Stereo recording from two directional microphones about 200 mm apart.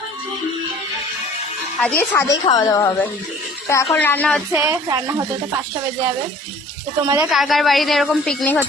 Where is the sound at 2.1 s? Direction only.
15° left (ahead or behind).